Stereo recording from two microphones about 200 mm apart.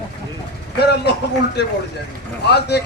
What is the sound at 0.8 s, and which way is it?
Speech, 55° left (ahead or behind).